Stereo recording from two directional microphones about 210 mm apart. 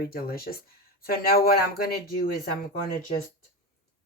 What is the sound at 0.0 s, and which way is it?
Speech, 45° left (ahead or behind).